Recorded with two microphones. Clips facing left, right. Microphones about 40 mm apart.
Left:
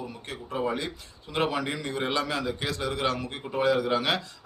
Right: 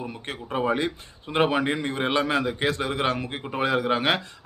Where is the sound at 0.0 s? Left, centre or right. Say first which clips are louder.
Right 4 dB; right.